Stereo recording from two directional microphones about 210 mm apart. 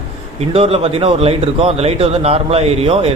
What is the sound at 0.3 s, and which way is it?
A man's voice, 30° right (ahead or behind).